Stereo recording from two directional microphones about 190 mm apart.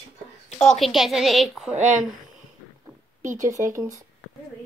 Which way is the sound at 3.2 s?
40° right (ahead or behind).